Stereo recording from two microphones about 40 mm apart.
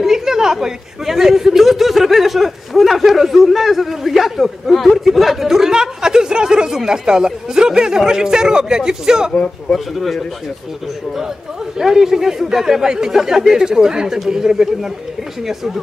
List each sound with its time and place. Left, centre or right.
0.0 s speech: centre
9.3 s speech: centre
9.9 s speech: centre
11.8 s speech: centre